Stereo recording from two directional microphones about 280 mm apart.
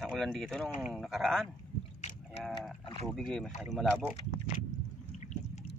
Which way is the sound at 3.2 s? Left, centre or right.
Centre.